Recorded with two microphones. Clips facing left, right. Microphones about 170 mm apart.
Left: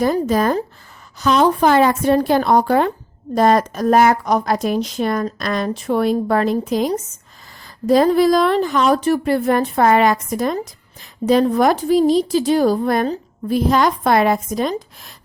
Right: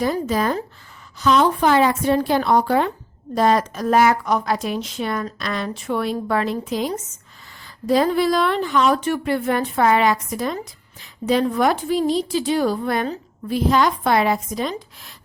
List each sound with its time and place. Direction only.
0.0 s a woman's voice: 45° left (ahead or behind)